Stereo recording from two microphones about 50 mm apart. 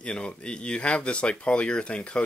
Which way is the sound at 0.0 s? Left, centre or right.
Centre.